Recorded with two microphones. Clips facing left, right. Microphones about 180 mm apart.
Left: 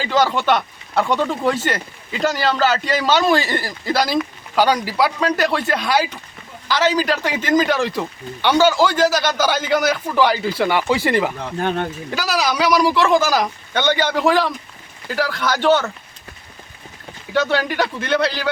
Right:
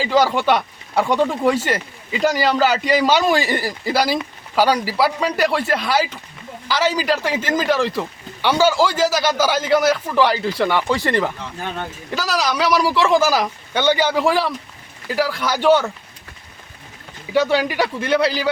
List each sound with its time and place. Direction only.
0.0 s speech: 10° right (ahead or behind); by 11.3 s 5° left (ahead or behind)
11.4 s speech: 55° left (ahead or behind)
12.1 s speech: centre (ahead or behind)
17.3 s speech: 10° right (ahead or behind)